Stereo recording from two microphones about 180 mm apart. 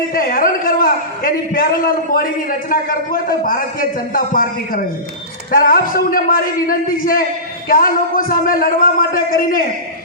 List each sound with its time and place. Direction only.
0.1 s a man's voice: 50° left (ahead or behind)